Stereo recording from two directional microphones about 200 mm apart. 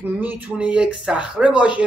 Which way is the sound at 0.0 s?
10° right (ahead or behind).